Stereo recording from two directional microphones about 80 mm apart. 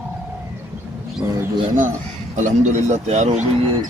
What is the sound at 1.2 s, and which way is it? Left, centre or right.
Speech, right.